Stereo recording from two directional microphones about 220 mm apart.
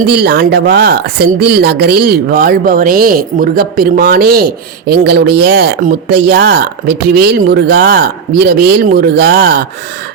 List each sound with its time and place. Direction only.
0.1 s speech: 45° right (ahead or behind)